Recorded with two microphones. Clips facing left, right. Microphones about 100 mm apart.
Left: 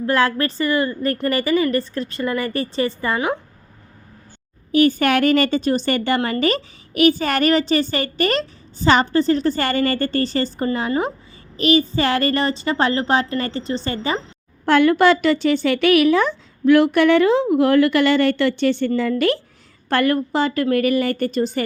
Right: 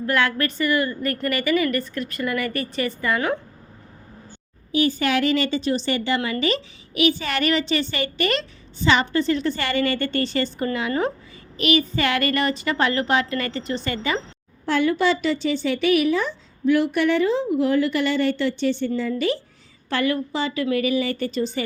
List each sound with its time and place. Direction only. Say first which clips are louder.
0.0 s a woman's voice: left 3 dB; 30° left (ahead or behind)
4.7 s a woman's voice: left 5 dB; 55° left (ahead or behind); by 14.2 s 30° left (ahead or behind)
14.6 s speech: left 6 dB; 65° left (ahead or behind)
19.9 s a woman's voice: left 5 dB; 50° left (ahead or behind)